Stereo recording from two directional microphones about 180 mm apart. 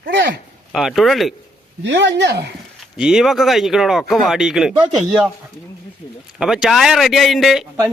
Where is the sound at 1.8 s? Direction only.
85° right.